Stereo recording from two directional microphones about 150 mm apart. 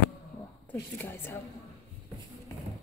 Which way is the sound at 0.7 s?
15° left (ahead or behind).